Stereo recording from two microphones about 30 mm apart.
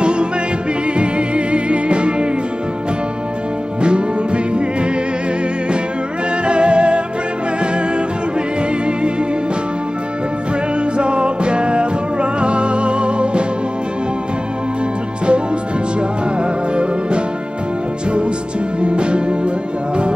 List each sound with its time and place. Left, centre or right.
0.0 s music: right
3.8 s music: right
6.4 s music: right
11.0 s music: right
18.8 s music: right